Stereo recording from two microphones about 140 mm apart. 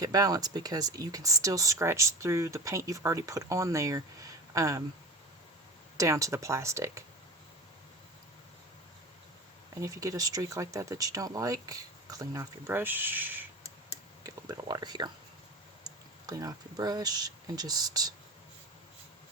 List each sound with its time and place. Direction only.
0.0 s speech: 25° right (ahead or behind)
6.0 s speech: 20° right (ahead or behind)
9.8 s speech: 25° right (ahead or behind)
14.3 s speech: 25° right (ahead or behind)